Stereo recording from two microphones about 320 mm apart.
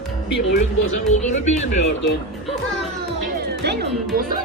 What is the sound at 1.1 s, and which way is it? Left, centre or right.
Speech, left.